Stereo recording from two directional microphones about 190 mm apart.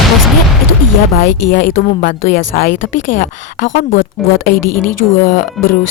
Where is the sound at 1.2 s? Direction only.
45° left (ahead or behind).